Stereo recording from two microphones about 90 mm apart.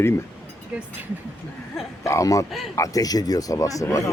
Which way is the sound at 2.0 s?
35° left (ahead or behind).